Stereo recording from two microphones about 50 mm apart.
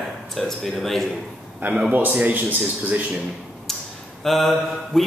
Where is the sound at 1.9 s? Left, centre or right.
Right.